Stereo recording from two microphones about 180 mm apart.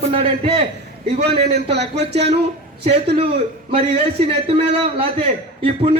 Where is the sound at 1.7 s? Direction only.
70° right (ahead or behind).